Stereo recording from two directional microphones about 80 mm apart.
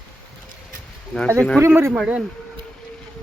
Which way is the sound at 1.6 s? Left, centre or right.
Right.